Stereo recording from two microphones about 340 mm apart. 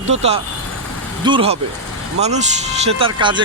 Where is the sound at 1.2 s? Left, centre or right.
Centre.